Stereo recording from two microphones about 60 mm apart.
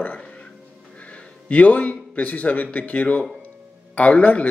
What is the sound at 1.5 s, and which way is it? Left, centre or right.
Speech, left.